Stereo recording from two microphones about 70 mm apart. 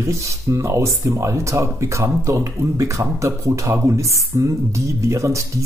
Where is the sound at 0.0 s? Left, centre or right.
Right.